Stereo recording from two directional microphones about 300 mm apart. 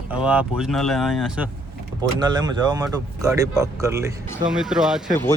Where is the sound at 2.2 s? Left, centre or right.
Centre.